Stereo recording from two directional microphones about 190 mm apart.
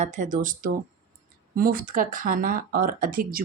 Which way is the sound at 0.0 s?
40° right (ahead or behind).